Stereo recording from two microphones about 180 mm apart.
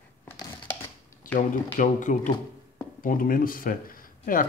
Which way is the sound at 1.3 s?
45° left (ahead or behind).